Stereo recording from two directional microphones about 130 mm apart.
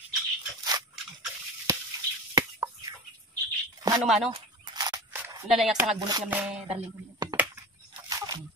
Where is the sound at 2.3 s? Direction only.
30° right (ahead or behind).